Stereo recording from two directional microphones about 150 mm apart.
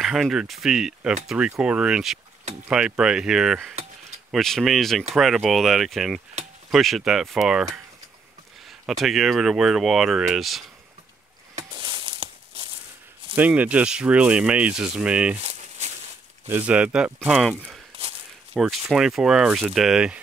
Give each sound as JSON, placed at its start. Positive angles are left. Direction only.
{"t": 0.0, "sound": "speech", "side_deg": 0}
{"t": 8.6, "sound": "speech", "side_deg": 0}
{"t": 11.7, "sound": "a sound", "side_deg": -30}
{"t": 13.4, "sound": "speech", "side_deg": -10}
{"t": 15.3, "sound": "a sound", "side_deg": -45}
{"t": 16.4, "sound": "speech", "side_deg": -10}
{"t": 18.5, "sound": "speech", "side_deg": 0}